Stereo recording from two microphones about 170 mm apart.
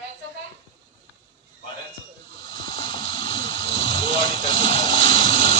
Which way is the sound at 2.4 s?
25° left (ahead or behind).